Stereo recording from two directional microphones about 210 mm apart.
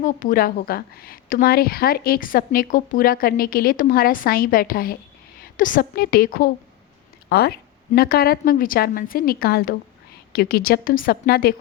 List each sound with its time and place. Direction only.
0.0 s a woman's voice: 40° left (ahead or behind)